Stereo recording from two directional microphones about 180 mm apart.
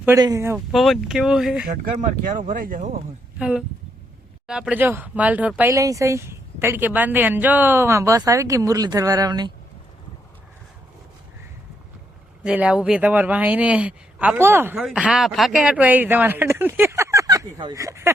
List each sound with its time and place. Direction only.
0.2 s speech: 15° right (ahead or behind)
0.7 s speech: centre (ahead or behind)
2.5 s speech: 50° right (ahead or behind)
3.3 s speech: 5° right (ahead or behind); by 9.5 s 20° right (ahead or behind)
12.4 s speech: 5° right (ahead or behind)
14.8 s speech: centre (ahead or behind)